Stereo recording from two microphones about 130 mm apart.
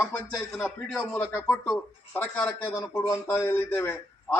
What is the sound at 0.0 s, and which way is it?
Speech, 20° left (ahead or behind).